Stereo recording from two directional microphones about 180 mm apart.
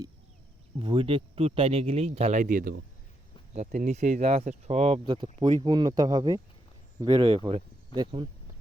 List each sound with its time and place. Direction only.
0.8 s speech: 30° right (ahead or behind)